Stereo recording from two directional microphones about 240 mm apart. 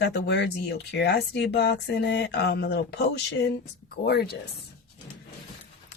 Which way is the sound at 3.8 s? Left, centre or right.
Left.